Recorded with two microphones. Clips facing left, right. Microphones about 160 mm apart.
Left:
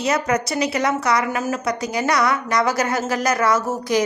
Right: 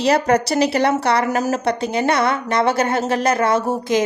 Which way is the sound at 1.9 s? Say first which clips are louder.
Even; 25° right (ahead or behind).